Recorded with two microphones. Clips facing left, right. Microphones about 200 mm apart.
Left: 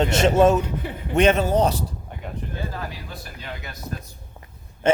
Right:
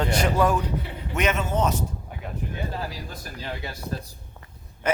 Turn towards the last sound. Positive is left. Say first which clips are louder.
# left 5 dB
turn(degrees=25)  # may be behind; listen again after turning